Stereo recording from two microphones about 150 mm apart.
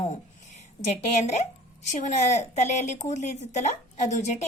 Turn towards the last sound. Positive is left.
turn(degrees=50)  # may be behind; listen again after turning